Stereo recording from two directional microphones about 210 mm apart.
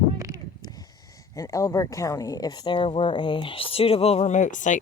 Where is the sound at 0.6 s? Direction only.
20° left (ahead or behind).